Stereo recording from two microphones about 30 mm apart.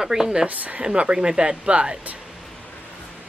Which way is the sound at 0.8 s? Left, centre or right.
Right.